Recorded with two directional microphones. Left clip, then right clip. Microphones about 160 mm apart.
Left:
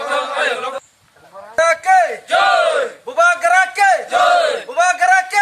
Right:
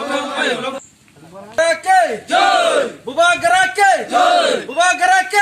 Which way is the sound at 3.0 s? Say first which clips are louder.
Left 1 dB; 10° right (ahead or behind).